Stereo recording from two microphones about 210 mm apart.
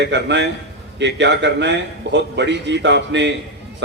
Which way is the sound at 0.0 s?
55° right (ahead or behind).